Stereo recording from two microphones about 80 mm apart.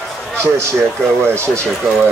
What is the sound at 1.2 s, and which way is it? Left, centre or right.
Speech, right.